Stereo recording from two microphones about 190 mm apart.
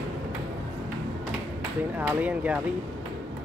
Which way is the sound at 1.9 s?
10° right (ahead or behind).